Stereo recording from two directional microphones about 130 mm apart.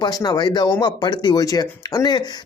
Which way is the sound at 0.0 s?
30° left (ahead or behind).